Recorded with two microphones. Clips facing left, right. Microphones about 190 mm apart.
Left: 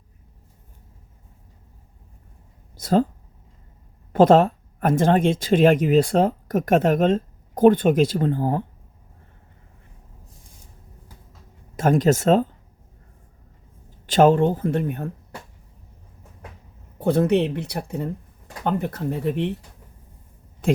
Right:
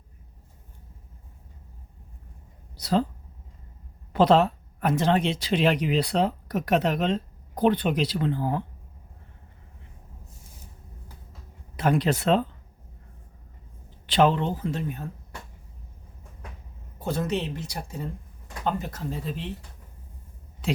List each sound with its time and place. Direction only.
2.7 s speech: 50° left (ahead or behind)
4.1 s speech: 50° left (ahead or behind)
11.8 s speech: 45° left (ahead or behind)
14.1 s speech: 45° left (ahead or behind)
17.0 s speech: 60° left (ahead or behind)
20.6 s speech: 50° left (ahead or behind)